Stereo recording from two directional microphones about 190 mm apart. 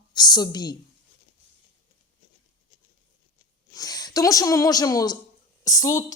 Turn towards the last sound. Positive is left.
turn(degrees=20)  # may be behind; listen again after turning